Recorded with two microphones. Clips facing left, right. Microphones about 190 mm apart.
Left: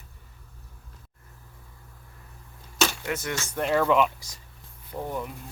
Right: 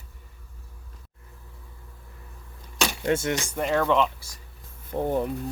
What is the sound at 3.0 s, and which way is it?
Speech, 25° right (ahead or behind).